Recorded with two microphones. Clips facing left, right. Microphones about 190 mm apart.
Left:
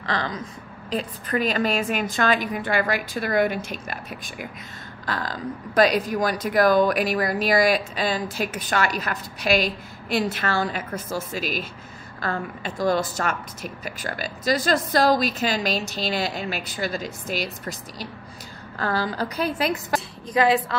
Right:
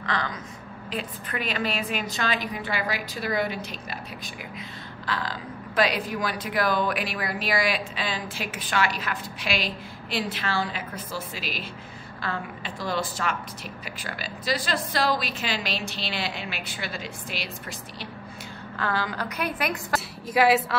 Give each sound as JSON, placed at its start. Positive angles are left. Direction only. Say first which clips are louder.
{"t": 0.0, "sound": "a woman's voice", "louder": "left 3 dB", "side_deg": 35}
{"t": 20.3, "sound": "speech", "louder": "left 1 dB", "side_deg": -5}